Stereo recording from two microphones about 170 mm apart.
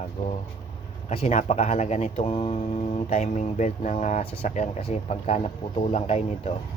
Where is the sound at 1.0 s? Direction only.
40° left (ahead or behind).